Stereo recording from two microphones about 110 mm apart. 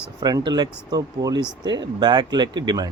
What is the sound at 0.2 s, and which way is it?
Speech, 40° right (ahead or behind).